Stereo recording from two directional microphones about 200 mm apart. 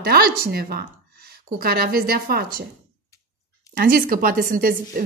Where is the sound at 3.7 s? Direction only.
45° right (ahead or behind).